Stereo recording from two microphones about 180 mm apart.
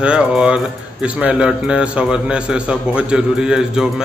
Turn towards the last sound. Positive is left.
turn(degrees=-5)  # may be behind; listen again after turning